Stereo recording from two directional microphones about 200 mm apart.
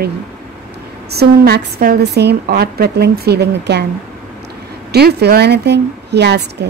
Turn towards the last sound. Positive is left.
turn(degrees=-55)  # may be behind; listen again after turning